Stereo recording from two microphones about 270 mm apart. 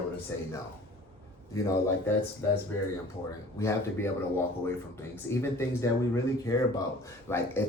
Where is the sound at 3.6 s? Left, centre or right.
Centre.